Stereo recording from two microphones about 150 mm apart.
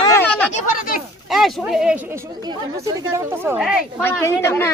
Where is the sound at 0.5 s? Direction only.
65° left (ahead or behind).